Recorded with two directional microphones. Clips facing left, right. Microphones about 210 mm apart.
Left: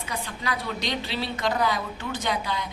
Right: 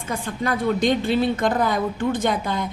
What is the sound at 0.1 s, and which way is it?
A woman's voice, 50° right (ahead or behind).